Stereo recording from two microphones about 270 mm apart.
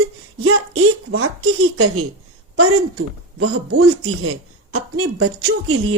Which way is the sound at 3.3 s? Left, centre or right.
Right.